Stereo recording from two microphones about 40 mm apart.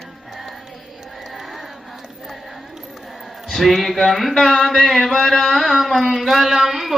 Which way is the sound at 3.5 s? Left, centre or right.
Centre.